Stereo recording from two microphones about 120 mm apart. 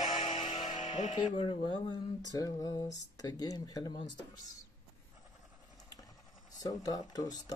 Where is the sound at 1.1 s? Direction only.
45° left (ahead or behind).